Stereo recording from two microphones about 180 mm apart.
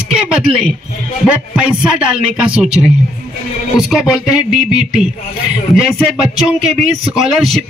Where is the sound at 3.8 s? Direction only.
5° right (ahead or behind).